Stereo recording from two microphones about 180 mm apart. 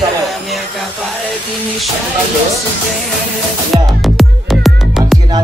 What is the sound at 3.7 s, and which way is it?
Music, centre (ahead or behind).